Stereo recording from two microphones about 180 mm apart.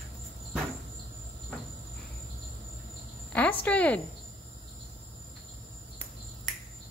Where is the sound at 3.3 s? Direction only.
5° left (ahead or behind).